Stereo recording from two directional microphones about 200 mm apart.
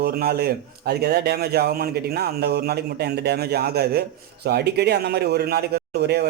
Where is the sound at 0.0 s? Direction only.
50° right (ahead or behind).